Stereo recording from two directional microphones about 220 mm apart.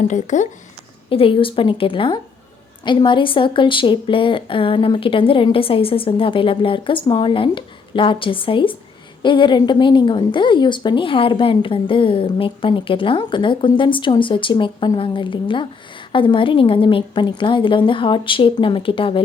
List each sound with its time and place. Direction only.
0.1 s a woman's voice: 35° left (ahead or behind)